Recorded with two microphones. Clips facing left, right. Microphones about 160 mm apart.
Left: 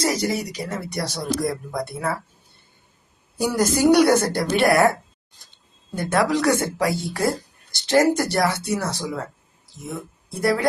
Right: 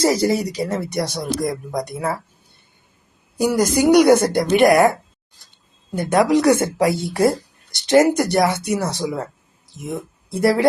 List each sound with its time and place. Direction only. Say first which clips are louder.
0.0 s speech: right 6 dB; 30° right (ahead or behind)
0.9 s a woman's voice: right 3 dB; 20° right (ahead or behind)
3.3 s a woman's voice: right 4 dB; 10° right (ahead or behind)
10.2 s speech: right 5 dB; 25° right (ahead or behind)